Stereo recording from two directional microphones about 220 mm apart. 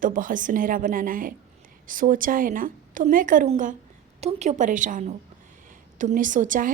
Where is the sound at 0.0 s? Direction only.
40° right (ahead or behind).